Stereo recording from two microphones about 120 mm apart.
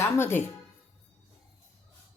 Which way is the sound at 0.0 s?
20° left (ahead or behind).